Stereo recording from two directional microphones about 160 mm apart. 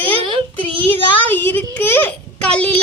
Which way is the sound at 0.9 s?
10° left (ahead or behind).